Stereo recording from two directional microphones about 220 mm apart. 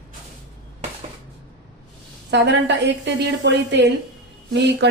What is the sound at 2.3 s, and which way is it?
A woman's voice, 50° right (ahead or behind).